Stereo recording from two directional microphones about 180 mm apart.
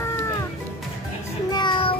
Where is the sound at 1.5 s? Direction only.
25° left (ahead or behind).